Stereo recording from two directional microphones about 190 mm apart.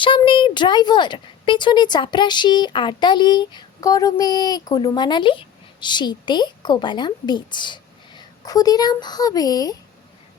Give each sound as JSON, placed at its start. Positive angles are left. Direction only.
{"t": 0.0, "sound": "speech", "side_deg": 25}